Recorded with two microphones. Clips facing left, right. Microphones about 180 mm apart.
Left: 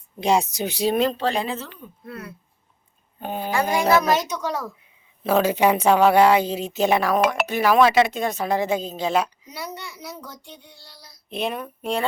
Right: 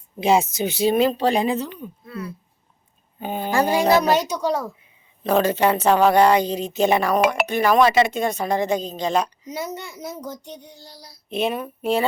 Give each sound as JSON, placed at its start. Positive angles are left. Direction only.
{"t": 0.2, "sound": "speech", "side_deg": -5}
{"t": 1.1, "sound": "a woman's voice", "side_deg": -15}
{"t": 2.0, "sound": "speech", "side_deg": 60}
{"t": 3.2, "sound": "speech", "side_deg": 0}
{"t": 3.5, "sound": "speech", "side_deg": -35}
{"t": 5.2, "sound": "speech", "side_deg": 5}
{"t": 9.5, "sound": "a child's voice", "side_deg": -45}
{"t": 11.3, "sound": "speech", "side_deg": 0}